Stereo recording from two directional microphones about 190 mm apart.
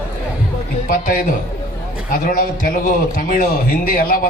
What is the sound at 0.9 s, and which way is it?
A man's voice, 45° left (ahead or behind).